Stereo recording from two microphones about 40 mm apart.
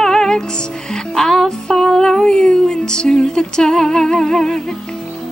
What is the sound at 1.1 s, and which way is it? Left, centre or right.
Music, centre.